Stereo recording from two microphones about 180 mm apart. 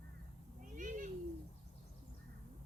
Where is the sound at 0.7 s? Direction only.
45° right (ahead or behind).